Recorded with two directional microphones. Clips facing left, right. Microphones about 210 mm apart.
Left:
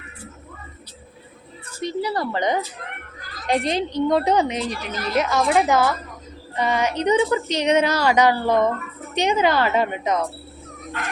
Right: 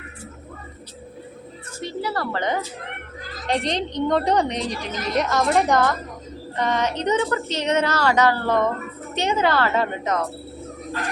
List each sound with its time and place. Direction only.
1.8 s a woman's voice: 15° left (ahead or behind)